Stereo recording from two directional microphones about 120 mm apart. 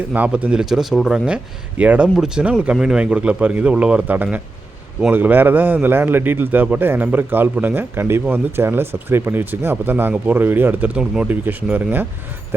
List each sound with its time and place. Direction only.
0.1 s a man's voice: 10° right (ahead or behind)